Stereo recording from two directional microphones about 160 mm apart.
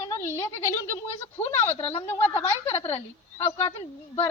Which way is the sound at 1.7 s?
40° left (ahead or behind).